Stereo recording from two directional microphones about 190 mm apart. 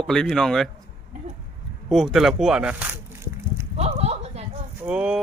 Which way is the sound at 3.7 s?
35° right (ahead or behind).